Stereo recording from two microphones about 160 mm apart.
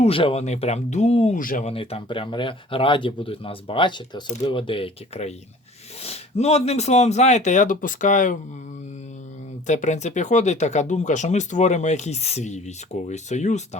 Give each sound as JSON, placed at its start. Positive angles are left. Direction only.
{"t": 0.0, "sound": "speech", "side_deg": 35}
{"t": 1.4, "sound": "speech", "side_deg": 60}
{"t": 1.6, "sound": "speech", "side_deg": 35}
{"t": 9.6, "sound": "speech", "side_deg": 50}